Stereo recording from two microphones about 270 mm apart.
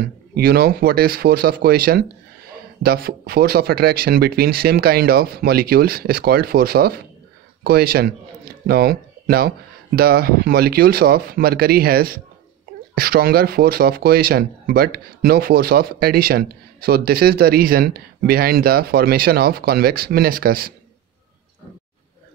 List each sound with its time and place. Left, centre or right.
0.3 s speech: right